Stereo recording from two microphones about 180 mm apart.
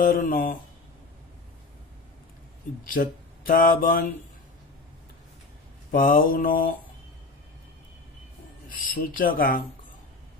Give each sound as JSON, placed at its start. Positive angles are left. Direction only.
{"t": 0.0, "sound": "speech", "side_deg": 50}
{"t": 2.8, "sound": "speech", "side_deg": 55}
{"t": 5.9, "sound": "speech", "side_deg": 55}
{"t": 8.6, "sound": "speech", "side_deg": 55}